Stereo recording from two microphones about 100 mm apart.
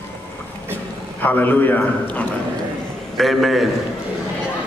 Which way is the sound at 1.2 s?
15° left (ahead or behind).